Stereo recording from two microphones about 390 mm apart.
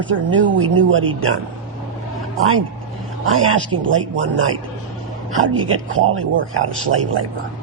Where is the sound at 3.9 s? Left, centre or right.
Right.